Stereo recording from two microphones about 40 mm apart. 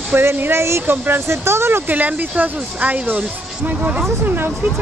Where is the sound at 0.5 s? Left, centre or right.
Right.